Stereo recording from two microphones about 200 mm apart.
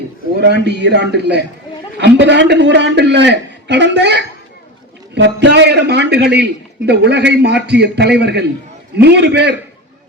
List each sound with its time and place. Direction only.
0.3 s a man's voice: 55° right (ahead or behind)